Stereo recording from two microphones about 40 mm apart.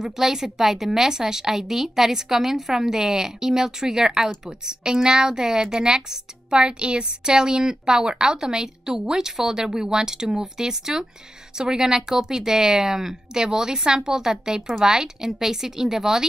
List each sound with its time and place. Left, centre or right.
0.0 s a woman's voice: centre